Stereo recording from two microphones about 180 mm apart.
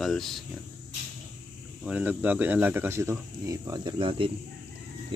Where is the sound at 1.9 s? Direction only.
10° right (ahead or behind).